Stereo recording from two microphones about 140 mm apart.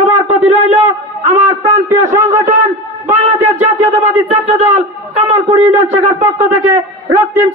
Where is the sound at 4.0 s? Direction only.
50° right (ahead or behind).